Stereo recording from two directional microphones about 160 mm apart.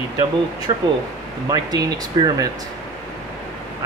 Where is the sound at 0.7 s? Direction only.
25° right (ahead or behind).